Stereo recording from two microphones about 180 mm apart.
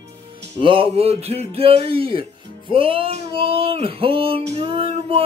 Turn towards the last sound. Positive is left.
turn(degrees=-30)  # may be behind; listen again after turning